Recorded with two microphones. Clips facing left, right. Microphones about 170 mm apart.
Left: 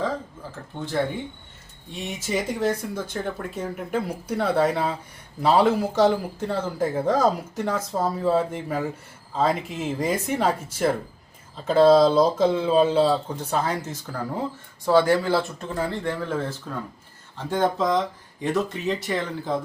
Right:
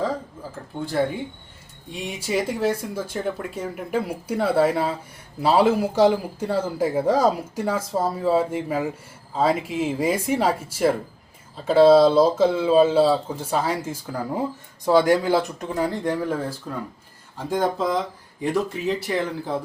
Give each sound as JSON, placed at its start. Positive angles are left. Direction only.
{"t": 1.9, "sound": "speech", "side_deg": -10}